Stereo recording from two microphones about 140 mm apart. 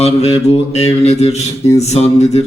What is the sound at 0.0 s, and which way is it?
A man's voice, 50° left (ahead or behind).